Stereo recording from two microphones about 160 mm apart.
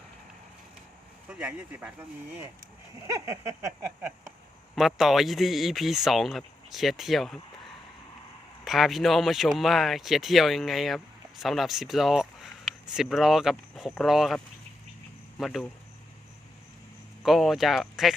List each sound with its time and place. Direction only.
1.3 s speech: 10° right (ahead or behind)
4.7 s speech: centre (ahead or behind)
8.6 s speech: centre (ahead or behind)
17.2 s speech: centre (ahead or behind)